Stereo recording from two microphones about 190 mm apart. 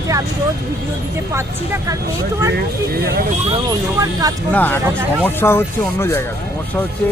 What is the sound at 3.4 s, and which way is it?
Speech, 20° right (ahead or behind).